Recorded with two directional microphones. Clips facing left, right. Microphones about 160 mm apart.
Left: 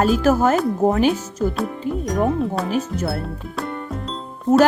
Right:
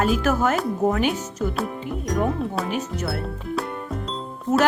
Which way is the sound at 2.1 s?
Centre (ahead or behind).